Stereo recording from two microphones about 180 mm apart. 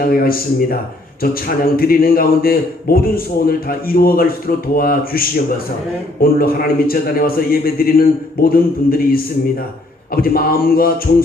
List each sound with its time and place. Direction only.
0.0 s a man's voice: 55° left (ahead or behind)
6.2 s a man's voice: 55° left (ahead or behind)
10.1 s a man's voice: 55° left (ahead or behind)